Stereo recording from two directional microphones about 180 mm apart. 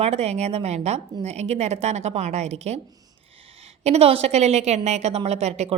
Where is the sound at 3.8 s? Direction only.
35° right (ahead or behind).